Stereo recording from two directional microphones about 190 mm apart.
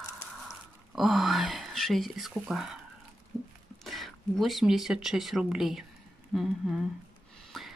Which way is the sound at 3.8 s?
Centre (ahead or behind).